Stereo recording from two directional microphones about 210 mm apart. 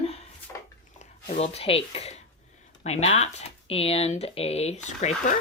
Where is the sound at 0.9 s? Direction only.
30° left (ahead or behind).